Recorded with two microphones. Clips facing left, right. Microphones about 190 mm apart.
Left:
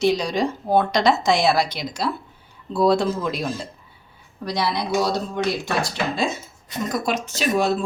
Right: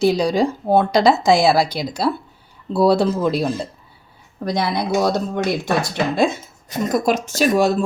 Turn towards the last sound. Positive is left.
turn(degrees=-45)  # may be behind; listen again after turning